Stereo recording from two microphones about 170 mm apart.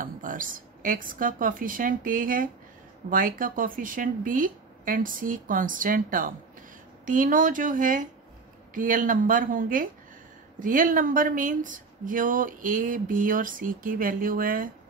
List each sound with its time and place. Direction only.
0.0 s speech: 55° right (ahead or behind)